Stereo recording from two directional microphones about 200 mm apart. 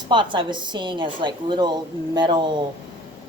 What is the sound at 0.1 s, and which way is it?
A woman's voice, 25° right (ahead or behind).